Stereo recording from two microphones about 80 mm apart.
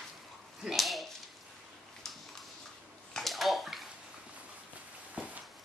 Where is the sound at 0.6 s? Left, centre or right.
Centre.